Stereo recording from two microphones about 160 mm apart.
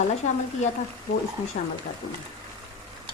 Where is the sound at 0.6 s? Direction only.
45° left (ahead or behind).